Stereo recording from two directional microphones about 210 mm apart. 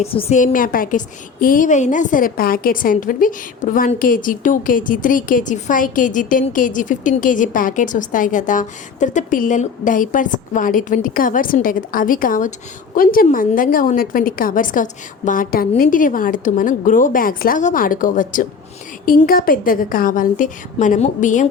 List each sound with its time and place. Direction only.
0.0 s a woman's voice: 30° left (ahead or behind)